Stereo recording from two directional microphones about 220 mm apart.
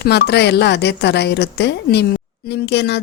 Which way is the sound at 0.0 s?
50° left (ahead or behind).